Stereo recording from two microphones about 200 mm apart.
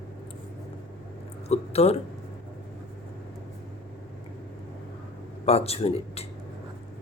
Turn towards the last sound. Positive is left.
turn(degrees=30)  # may be behind; listen again after turning